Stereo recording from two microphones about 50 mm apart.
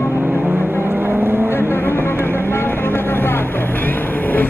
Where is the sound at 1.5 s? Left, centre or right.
Left.